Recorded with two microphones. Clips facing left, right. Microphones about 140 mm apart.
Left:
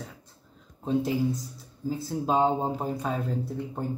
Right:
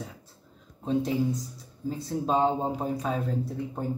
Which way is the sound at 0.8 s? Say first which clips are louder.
Even; 5° left (ahead or behind).